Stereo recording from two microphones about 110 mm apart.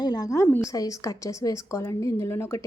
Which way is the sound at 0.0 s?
35° left (ahead or behind).